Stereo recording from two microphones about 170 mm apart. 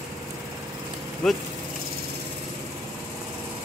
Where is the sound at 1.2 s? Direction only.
Centre (ahead or behind).